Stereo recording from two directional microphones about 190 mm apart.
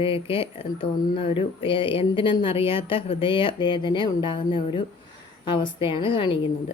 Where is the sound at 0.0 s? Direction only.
30° left (ahead or behind).